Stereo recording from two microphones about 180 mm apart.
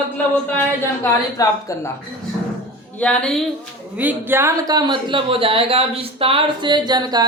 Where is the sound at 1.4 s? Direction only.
15° left (ahead or behind).